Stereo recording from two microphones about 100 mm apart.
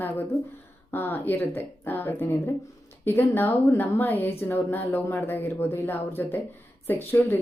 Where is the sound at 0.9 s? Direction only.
20° left (ahead or behind).